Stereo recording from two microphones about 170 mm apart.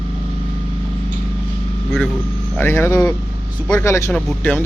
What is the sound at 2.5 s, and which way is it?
Speech, 15° left (ahead or behind).